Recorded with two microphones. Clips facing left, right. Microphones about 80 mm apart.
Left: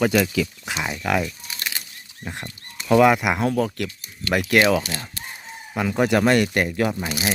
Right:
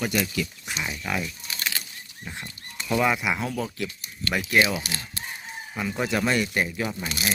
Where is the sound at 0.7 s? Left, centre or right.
Left.